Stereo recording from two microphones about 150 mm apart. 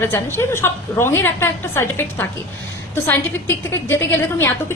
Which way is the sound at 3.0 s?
15° left (ahead or behind).